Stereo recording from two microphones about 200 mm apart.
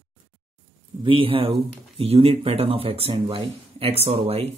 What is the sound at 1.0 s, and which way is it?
Speech, 25° right (ahead or behind).